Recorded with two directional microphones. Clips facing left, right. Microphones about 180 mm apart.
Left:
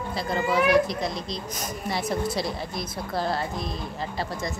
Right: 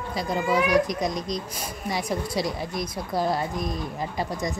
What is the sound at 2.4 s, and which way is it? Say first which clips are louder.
Speech: right 2 dB; 10° right (ahead or behind).